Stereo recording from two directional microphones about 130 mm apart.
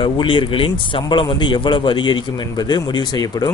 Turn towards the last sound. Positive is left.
turn(degrees=30)  # may be behind; listen again after turning